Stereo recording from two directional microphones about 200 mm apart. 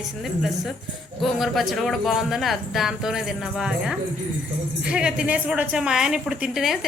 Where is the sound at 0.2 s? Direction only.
Centre (ahead or behind).